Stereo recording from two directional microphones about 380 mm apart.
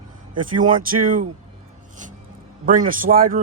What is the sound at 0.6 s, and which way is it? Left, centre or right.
Speech, right.